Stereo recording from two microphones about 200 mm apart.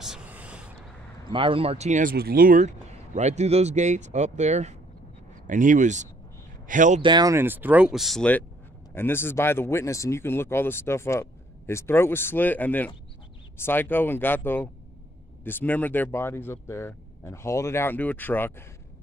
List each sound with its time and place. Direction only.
0.0 s a sound: 5° right (ahead or behind)
1.3 s speech: 25° right (ahead or behind)
7.0 s speech: 20° right (ahead or behind); by 18.5 s 10° left (ahead or behind)